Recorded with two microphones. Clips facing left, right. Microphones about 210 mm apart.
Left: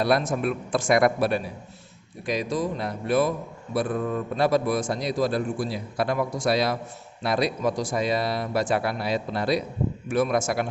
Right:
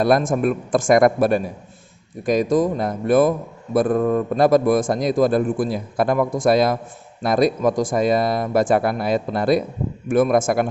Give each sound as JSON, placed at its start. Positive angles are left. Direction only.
{"t": 0.0, "sound": "a man's voice", "side_deg": -50}